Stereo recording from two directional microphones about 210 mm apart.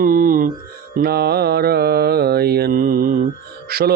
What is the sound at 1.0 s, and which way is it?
Speech, 50° right (ahead or behind).